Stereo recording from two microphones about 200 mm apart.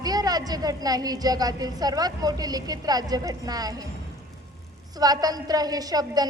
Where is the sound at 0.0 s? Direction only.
20° right (ahead or behind).